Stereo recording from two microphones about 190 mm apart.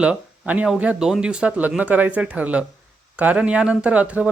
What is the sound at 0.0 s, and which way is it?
Speech, 5° right (ahead or behind).